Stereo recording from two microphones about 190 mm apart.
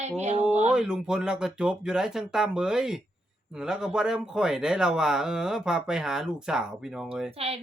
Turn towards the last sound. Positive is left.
turn(degrees=-30)  # may be behind; listen again after turning